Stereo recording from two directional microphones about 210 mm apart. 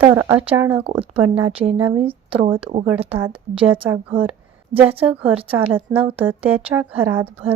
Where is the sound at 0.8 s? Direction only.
25° right (ahead or behind).